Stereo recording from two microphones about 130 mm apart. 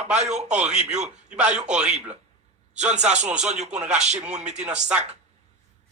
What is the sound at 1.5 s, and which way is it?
A man's voice, 65° right (ahead or behind).